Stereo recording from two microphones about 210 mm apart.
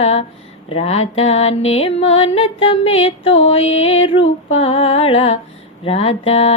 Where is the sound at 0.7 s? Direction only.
30° left (ahead or behind).